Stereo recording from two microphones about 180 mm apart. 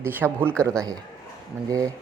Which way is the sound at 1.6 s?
20° right (ahead or behind).